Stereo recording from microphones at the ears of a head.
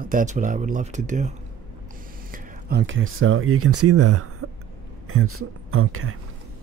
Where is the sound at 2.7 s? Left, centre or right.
Right.